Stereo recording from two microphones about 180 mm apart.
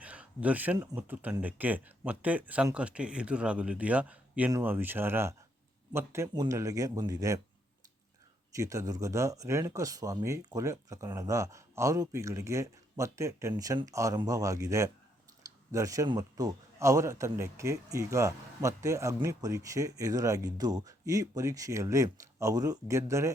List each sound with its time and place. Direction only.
0.0 s a sound: 5° right (ahead or behind)
0.8 s speech: 10° right (ahead or behind)
8.5 s speech: 15° right (ahead or behind)